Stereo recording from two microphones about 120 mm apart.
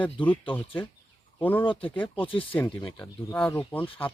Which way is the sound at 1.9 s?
15° left (ahead or behind).